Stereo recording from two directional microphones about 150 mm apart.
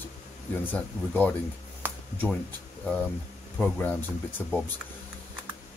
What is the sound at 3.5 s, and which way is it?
Speech, 10° left (ahead or behind).